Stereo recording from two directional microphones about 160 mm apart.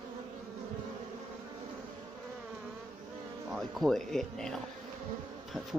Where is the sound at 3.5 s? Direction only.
Centre (ahead or behind).